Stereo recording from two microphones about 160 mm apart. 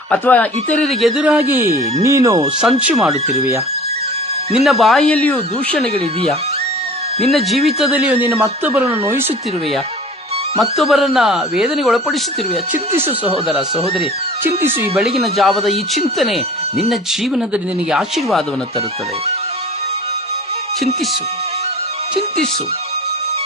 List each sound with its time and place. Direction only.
0.1 s speech: 10° left (ahead or behind); by 2.5 s 20° right (ahead or behind)
2.6 s speech: 5° right (ahead or behind)
4.6 s speech: centre (ahead or behind)
7.3 s speech: centre (ahead or behind); by 9.2 s 15° right (ahead or behind)
10.6 s speech: centre (ahead or behind)
15.2 s speech: centre (ahead or behind)